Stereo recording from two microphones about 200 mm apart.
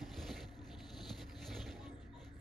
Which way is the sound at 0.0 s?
Centre (ahead or behind).